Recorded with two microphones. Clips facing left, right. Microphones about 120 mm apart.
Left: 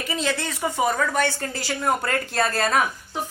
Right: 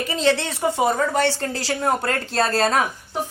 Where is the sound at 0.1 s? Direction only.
30° right (ahead or behind).